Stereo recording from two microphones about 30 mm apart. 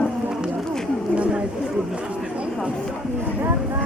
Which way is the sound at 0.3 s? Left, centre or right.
Right.